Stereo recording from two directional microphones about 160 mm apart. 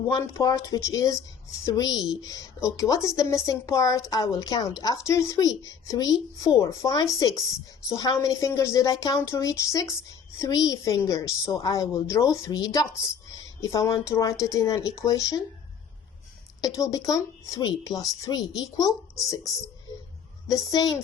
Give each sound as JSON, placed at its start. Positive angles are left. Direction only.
{"t": 0.1, "sound": "a woman's voice", "side_deg": 20}
{"t": 16.6, "sound": "a woman's voice", "side_deg": 20}
{"t": 20.5, "sound": "a woman's voice", "side_deg": 20}